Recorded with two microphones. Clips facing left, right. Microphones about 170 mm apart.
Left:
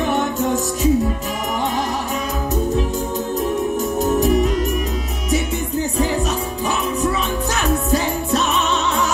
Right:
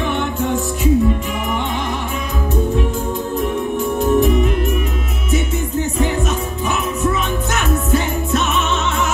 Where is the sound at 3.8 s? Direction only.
40° left (ahead or behind).